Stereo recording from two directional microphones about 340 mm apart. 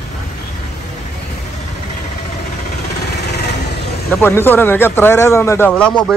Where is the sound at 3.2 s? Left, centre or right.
Left.